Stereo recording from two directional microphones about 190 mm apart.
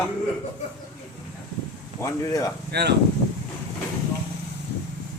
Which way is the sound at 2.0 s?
15° left (ahead or behind).